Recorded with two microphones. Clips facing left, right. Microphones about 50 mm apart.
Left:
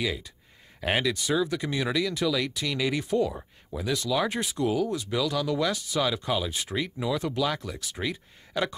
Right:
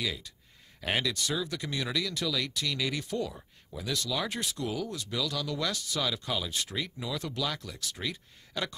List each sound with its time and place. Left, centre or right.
0.0 s speech: centre